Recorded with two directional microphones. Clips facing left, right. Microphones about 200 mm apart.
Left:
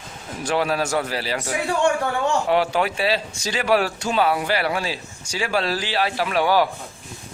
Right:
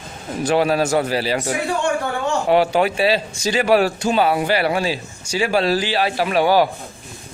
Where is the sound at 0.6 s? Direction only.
30° right (ahead or behind).